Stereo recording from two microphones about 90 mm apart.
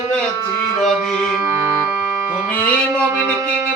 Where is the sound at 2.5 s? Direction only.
15° left (ahead or behind).